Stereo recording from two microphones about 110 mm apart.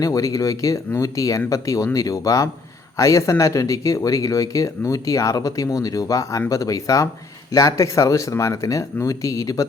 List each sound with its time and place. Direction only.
0.0 s speech: 30° left (ahead or behind)